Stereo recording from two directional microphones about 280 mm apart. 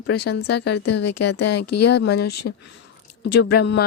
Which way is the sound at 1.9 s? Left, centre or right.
Left.